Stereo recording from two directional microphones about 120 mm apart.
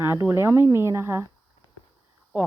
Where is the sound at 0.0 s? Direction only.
20° right (ahead or behind).